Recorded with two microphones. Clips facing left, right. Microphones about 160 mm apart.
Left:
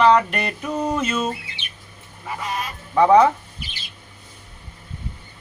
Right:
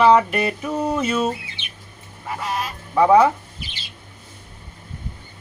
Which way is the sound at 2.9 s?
5° right (ahead or behind).